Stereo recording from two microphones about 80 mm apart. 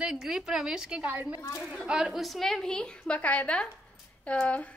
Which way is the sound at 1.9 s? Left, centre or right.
Centre.